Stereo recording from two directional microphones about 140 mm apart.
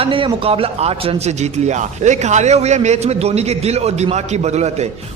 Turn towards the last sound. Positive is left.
turn(degrees=-50)  # may be behind; listen again after turning